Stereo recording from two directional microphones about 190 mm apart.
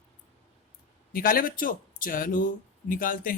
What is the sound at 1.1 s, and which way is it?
Speech, 50° left (ahead or behind).